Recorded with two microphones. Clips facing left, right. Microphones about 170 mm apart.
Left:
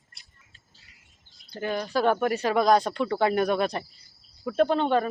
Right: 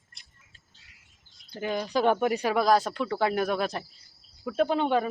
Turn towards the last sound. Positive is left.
turn(degrees=-10)  # may be behind; listen again after turning